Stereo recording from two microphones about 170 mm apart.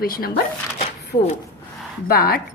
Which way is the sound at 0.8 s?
35° left (ahead or behind).